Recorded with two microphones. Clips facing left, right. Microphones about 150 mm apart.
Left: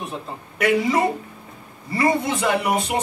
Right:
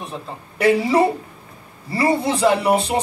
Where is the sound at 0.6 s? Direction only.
30° right (ahead or behind).